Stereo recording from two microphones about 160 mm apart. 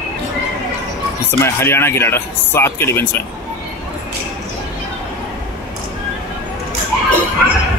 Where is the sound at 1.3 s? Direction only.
15° left (ahead or behind).